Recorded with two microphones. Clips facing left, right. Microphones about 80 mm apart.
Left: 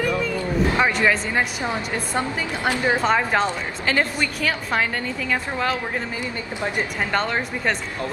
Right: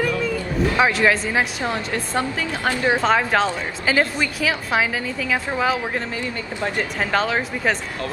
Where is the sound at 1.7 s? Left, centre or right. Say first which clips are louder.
Right 1 dB; centre.